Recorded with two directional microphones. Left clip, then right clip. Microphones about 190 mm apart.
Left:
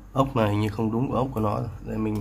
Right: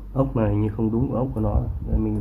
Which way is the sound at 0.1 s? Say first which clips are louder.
Even; 30° left (ahead or behind).